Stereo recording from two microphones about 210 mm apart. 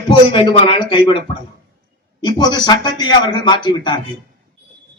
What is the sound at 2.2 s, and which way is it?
A man's voice, 20° left (ahead or behind).